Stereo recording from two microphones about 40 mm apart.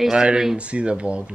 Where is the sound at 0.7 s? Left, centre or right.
Right.